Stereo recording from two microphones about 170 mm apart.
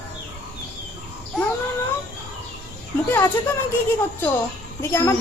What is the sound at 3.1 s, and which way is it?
Speech, 10° left (ahead or behind).